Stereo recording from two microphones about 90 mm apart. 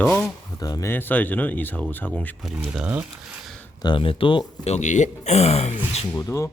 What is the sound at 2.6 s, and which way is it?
Speech, 10° right (ahead or behind).